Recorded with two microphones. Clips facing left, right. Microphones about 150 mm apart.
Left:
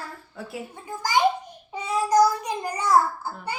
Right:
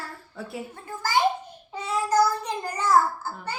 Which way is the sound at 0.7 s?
15° left (ahead or behind).